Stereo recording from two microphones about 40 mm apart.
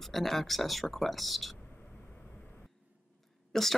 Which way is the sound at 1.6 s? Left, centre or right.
Left.